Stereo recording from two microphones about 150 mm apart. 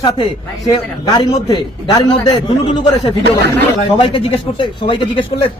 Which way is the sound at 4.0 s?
35° left (ahead or behind).